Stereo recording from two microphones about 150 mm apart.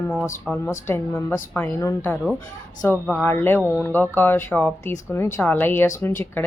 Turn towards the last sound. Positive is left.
turn(degrees=15)  # may be behind; listen again after turning